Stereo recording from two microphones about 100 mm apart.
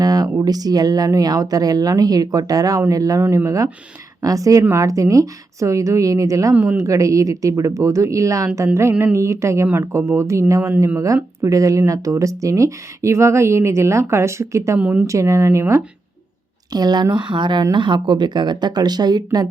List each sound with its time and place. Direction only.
0.0 s speech: 40° right (ahead or behind)
6.5 s speech: 20° right (ahead or behind)
6.8 s speech: 35° right (ahead or behind)
14.8 s a woman's voice: 15° right (ahead or behind)
15.0 s speech: 30° right (ahead or behind)
16.7 s speech: 45° right (ahead or behind)